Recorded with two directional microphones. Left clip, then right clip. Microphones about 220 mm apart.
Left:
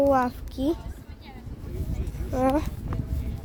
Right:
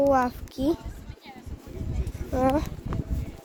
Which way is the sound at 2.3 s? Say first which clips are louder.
Even; centre (ahead or behind).